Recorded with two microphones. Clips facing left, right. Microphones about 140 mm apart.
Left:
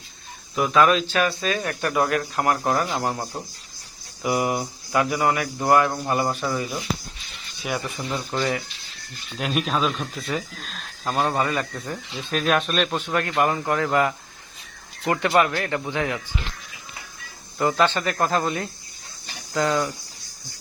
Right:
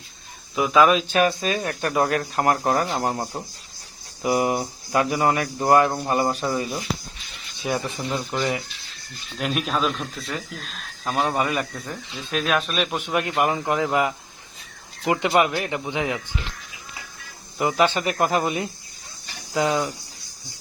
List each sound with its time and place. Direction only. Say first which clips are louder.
0.5 s speech: right 1 dB; 5° right (ahead or behind)
1.5 s speech: even; 25° right (ahead or behind)
9.4 s speech: even; centre (ahead or behind)
11.9 s speech: left 2 dB; centre (ahead or behind)
13.0 s speech: even; 15° right (ahead or behind)
17.6 s speech: even; 10° right (ahead or behind)